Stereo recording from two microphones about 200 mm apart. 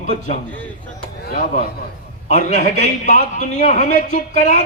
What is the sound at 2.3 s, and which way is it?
Speech, 35° left (ahead or behind).